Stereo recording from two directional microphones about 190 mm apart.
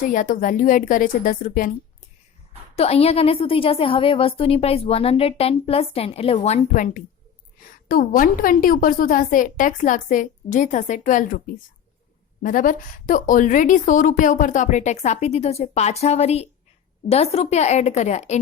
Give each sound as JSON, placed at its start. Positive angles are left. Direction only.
{"t": 0.0, "sound": "a woman's voice", "side_deg": 45}
{"t": 2.7, "sound": "a woman's voice", "side_deg": 30}